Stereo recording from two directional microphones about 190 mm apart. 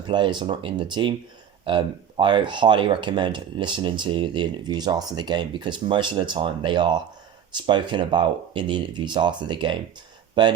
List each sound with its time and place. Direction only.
0.1 s speech: 25° right (ahead or behind)